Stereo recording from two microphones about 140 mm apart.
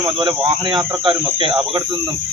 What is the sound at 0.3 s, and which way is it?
A man's voice, 40° right (ahead or behind).